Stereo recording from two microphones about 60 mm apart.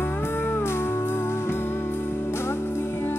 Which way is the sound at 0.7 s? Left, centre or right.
Left.